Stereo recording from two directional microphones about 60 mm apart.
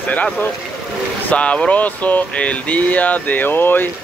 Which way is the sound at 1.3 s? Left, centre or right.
Left.